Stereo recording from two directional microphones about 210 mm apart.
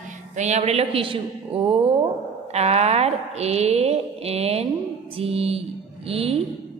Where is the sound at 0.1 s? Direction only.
35° right (ahead or behind).